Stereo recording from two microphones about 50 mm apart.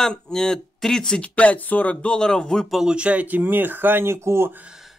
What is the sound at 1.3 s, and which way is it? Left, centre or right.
Speech, left.